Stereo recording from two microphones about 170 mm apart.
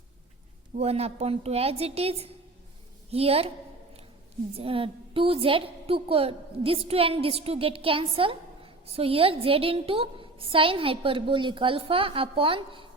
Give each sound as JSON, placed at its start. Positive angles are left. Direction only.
{"t": 0.8, "sound": "a woman's voice", "side_deg": -35}
{"t": 4.5, "sound": "a woman's voice", "side_deg": -35}